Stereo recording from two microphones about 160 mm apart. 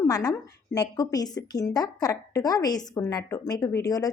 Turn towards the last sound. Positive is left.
turn(degrees=25)  # may be behind; listen again after turning